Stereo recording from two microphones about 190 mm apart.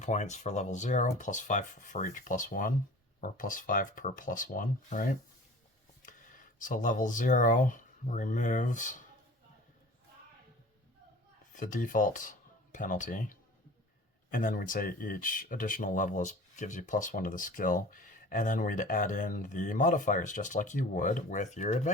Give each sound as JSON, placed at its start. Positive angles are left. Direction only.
{"t": 0.0, "sound": "speech", "side_deg": 40}
{"t": 11.5, "sound": "speech", "side_deg": 45}